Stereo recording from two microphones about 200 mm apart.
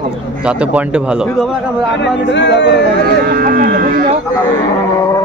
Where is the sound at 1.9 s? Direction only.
60° left (ahead or behind).